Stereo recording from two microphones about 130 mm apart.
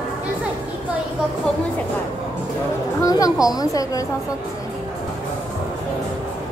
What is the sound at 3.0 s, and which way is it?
A woman's voice, 25° left (ahead or behind).